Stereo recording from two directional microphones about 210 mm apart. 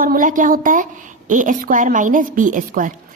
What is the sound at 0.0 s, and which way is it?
Speech, 40° right (ahead or behind).